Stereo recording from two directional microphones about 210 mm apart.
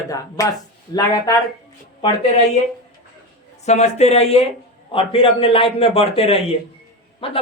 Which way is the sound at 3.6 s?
30° left (ahead or behind).